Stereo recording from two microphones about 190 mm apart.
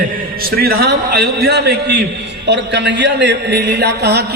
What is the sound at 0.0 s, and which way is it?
A man's voice, 50° right (ahead or behind).